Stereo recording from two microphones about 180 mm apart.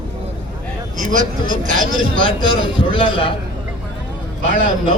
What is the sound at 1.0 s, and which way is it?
Speech, 45° right (ahead or behind).